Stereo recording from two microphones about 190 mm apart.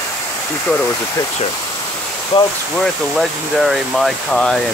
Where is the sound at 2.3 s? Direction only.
25° left (ahead or behind).